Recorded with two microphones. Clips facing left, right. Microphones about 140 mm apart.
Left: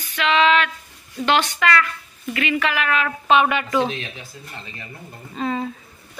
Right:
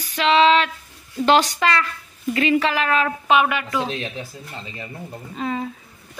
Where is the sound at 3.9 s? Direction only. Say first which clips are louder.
Right 3 dB; 35° right (ahead or behind).